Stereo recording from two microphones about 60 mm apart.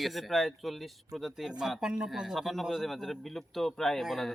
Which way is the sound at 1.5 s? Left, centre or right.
Centre.